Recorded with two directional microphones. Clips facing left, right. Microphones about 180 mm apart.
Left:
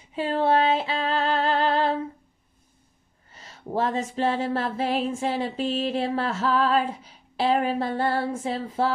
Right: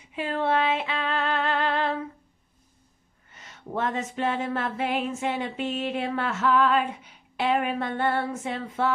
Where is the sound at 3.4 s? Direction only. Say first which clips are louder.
Left 3 dB; 35° left (ahead or behind).